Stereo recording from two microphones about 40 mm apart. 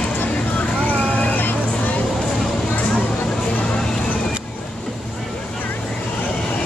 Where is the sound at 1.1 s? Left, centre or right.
Left.